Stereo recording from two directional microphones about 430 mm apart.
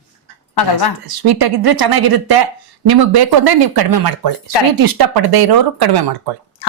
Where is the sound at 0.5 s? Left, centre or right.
Left.